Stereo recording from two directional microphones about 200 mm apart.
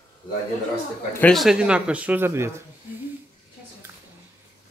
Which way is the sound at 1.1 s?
5° left (ahead or behind).